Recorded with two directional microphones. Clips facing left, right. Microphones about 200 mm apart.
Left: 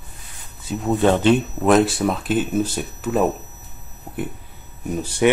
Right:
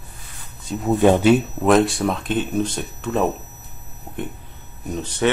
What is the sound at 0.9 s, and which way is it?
Speech, 15° right (ahead or behind).